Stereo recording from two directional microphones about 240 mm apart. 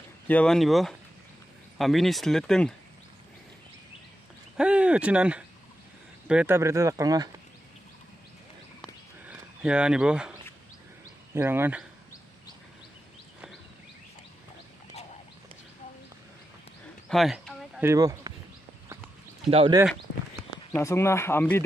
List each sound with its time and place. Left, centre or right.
0.3 s speech: centre
4.6 s speech: centre
9.2 s speech: centre
11.3 s speech: centre
17.1 s a sound: centre
17.8 s speech: centre
19.5 s speech: right
19.8 s a sound: centre
20.7 s speech: centre